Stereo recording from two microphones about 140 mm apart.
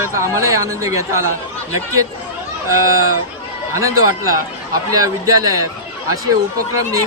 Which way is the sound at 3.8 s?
20° right (ahead or behind).